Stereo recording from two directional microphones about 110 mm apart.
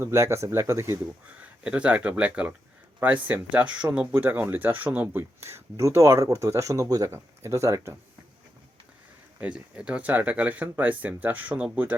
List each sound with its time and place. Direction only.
0.0 s speech: 25° right (ahead or behind)
1.4 s speech: 10° right (ahead or behind); by 7.9 s 30° right (ahead or behind)
9.4 s speech: 10° right (ahead or behind)